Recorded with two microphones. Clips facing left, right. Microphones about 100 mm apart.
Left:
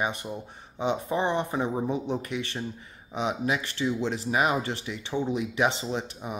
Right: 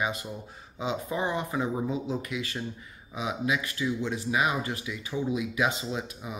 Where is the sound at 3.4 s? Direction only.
30° left (ahead or behind).